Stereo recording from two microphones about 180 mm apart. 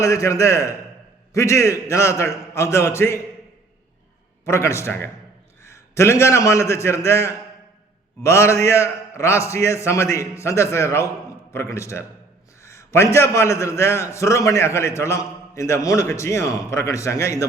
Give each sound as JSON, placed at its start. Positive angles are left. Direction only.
{"t": 0.0, "sound": "a man's voice", "side_deg": 15}
{"t": 4.4, "sound": "a man's voice", "side_deg": 15}